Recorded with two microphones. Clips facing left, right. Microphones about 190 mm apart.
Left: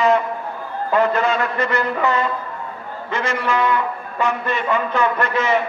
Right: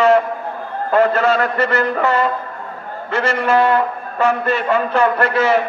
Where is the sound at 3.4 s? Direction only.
45° right (ahead or behind).